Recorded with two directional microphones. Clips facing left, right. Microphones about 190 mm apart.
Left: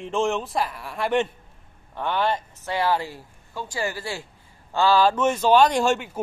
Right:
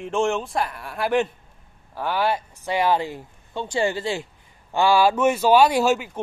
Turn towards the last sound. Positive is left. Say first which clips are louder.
# right 2 dB
turn(degrees=0)  # may be behind; listen again after turning